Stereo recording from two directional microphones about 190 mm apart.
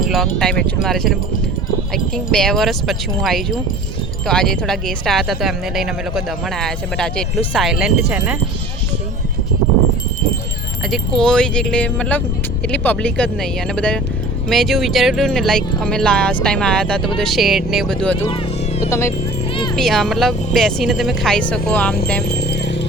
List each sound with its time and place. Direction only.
0.1 s speech: centre (ahead or behind)
2.1 s speech: 5° left (ahead or behind)
10.9 s speech: 5° left (ahead or behind)
18.9 s speech: 15° left (ahead or behind)
19.7 s speech: centre (ahead or behind)
22.3 s music: 60° left (ahead or behind)